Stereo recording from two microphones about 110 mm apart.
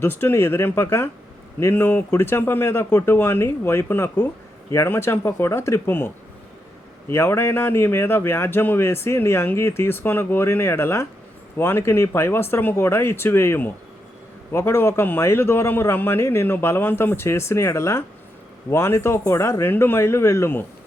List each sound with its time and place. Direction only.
0.0 s a man's voice: 20° left (ahead or behind)
7.1 s a man's voice: 20° left (ahead or behind)